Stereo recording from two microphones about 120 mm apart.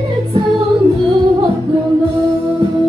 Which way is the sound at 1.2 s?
30° right (ahead or behind).